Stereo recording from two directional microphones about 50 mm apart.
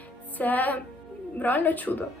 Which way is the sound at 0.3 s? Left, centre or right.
Left.